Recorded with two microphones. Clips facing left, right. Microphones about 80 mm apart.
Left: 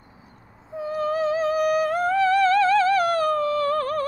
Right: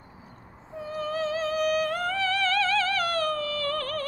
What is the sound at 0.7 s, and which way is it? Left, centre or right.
Music, centre.